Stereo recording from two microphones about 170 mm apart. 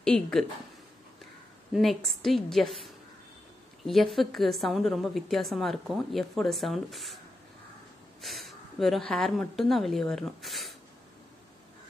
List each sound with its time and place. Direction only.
0.0 s a woman's voice: 5° left (ahead or behind)
1.7 s a woman's voice: centre (ahead or behind)
8.2 s a woman's voice: centre (ahead or behind)